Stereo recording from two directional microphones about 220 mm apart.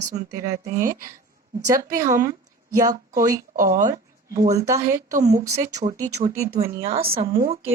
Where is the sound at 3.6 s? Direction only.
35° right (ahead or behind).